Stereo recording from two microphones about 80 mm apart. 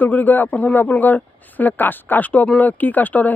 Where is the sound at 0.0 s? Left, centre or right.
Left.